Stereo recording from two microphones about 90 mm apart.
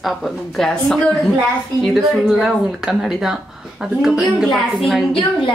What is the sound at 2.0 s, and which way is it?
A woman's voice, centre (ahead or behind).